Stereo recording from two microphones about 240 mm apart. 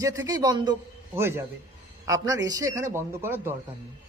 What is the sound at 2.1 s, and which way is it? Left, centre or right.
Speech, centre.